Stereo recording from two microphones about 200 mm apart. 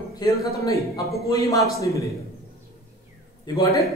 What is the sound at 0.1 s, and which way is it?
A man's voice, 15° left (ahead or behind).